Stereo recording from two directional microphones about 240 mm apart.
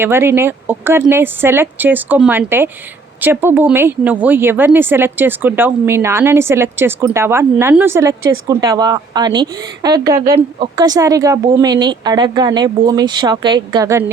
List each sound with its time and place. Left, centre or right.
0.0 s speech: centre